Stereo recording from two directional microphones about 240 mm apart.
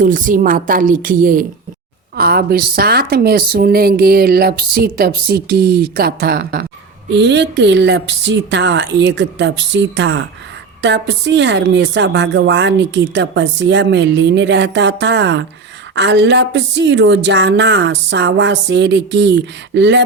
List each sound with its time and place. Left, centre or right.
0.0 s a woman's voice: right